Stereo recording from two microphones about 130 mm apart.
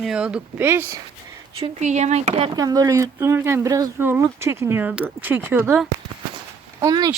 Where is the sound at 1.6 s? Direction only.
60° right (ahead or behind).